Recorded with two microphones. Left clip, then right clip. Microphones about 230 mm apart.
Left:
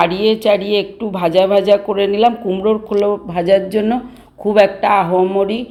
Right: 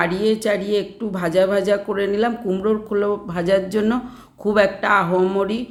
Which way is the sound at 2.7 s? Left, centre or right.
Centre.